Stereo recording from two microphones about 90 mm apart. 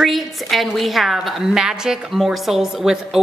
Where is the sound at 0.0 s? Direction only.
Centre (ahead or behind).